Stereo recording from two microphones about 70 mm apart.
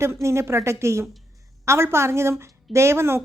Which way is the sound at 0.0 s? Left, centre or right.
Right.